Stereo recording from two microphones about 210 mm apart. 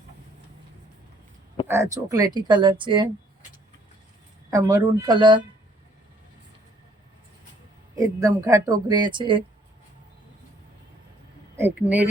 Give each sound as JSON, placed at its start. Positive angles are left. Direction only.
{"t": 1.6, "sound": "speech", "side_deg": -15}
{"t": 4.5, "sound": "speech", "side_deg": -15}
{"t": 7.9, "sound": "speech", "side_deg": -15}
{"t": 11.5, "sound": "speech", "side_deg": -10}